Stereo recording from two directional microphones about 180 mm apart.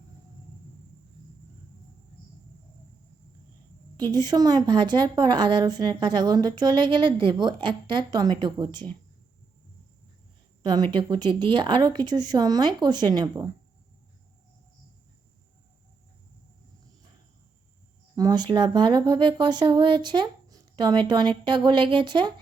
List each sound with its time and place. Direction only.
3.9 s speech: 25° right (ahead or behind)
10.6 s speech: 25° right (ahead or behind)
18.2 s speech: 25° right (ahead or behind)